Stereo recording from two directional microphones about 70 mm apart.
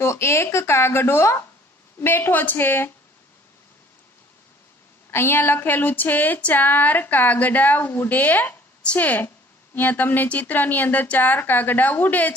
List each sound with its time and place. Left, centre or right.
0.0 s speech: left
5.1 s speech: left